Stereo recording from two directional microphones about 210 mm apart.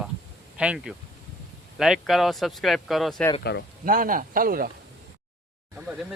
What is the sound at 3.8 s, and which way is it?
Speech, 40° right (ahead or behind).